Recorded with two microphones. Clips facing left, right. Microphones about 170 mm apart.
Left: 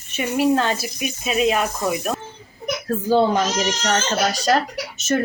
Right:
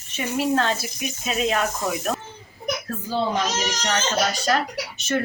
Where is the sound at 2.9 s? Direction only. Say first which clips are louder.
Left 12 dB; 45° left (ahead or behind).